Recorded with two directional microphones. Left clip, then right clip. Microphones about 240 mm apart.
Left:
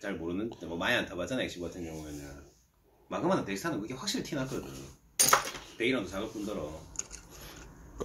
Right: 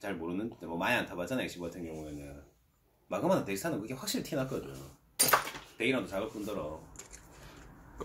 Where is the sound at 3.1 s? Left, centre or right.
Right.